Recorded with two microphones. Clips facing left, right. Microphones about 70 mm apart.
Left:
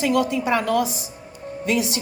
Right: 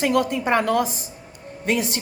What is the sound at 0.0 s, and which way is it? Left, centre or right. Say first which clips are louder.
A woman's voice: even; right.